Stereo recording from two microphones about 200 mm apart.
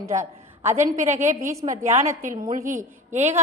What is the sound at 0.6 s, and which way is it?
Speech, 10° right (ahead or behind).